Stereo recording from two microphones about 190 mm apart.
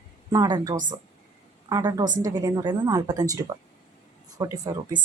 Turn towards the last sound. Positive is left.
turn(degrees=-20)  # may be behind; listen again after turning